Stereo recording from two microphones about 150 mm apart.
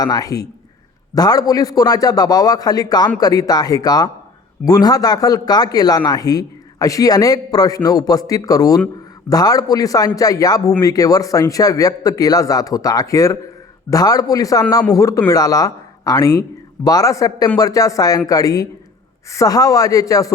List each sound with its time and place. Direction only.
0.0 s speech: 25° left (ahead or behind)